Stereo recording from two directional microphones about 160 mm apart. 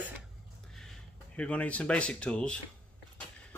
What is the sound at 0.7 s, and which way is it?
Speech, 5° left (ahead or behind).